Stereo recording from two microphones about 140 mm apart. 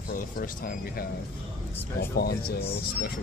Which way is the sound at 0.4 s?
90° left.